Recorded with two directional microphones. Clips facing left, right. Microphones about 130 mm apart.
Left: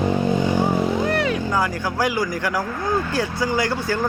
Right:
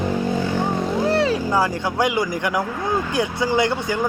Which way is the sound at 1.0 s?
30° right (ahead or behind).